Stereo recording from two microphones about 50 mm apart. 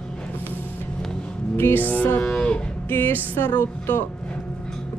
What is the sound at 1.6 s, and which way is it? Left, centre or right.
Music, left.